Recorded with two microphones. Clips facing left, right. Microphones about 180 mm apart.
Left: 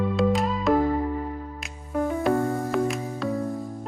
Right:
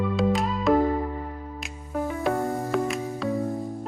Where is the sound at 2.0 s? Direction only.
Centre (ahead or behind).